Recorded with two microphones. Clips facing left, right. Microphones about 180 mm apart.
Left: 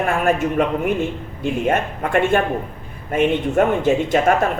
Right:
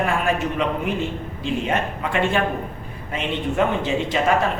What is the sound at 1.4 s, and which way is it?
A man's voice, 50° left (ahead or behind).